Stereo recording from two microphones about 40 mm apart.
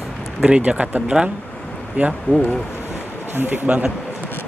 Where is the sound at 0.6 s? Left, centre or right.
Right.